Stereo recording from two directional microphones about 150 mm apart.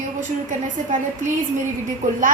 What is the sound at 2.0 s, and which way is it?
Speech, 55° right (ahead or behind).